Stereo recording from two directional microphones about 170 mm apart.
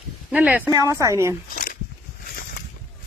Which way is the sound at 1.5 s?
55° left (ahead or behind).